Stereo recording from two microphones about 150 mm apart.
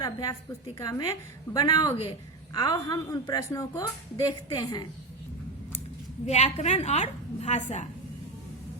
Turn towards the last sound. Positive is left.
turn(degrees=50)  # may be behind; listen again after turning